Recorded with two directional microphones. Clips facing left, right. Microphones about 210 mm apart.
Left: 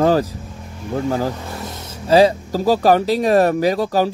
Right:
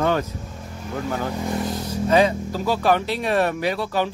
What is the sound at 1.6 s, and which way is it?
Speech, 25° left (ahead or behind).